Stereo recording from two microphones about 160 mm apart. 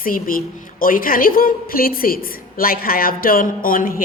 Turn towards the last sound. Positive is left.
turn(degrees=60)  # may be behind; listen again after turning